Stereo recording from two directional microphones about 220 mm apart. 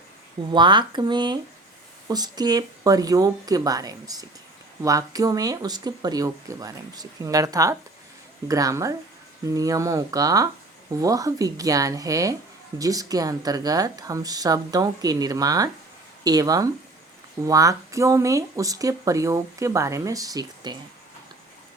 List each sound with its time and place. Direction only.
0.5 s speech: 20° right (ahead or behind)